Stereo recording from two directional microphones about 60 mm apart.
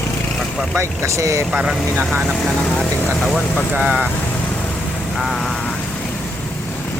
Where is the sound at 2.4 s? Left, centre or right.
Centre.